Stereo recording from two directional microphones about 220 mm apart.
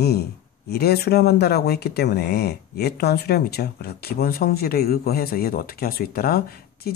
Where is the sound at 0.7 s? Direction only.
45° left (ahead or behind).